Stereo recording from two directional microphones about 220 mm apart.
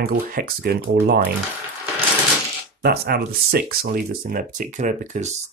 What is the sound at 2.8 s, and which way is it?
Speech, 45° right (ahead or behind).